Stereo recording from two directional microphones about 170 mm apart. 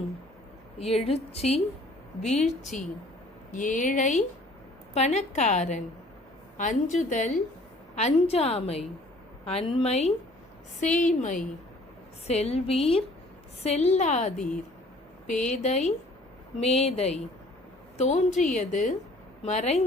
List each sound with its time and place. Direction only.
0.8 s a woman's voice: 35° left (ahead or behind)
14.3 s a woman's voice: 5° left (ahead or behind)
15.4 s a woman's voice: 45° left (ahead or behind)